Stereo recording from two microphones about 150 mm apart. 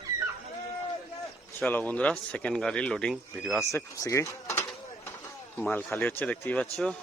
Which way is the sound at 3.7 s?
20° left (ahead or behind).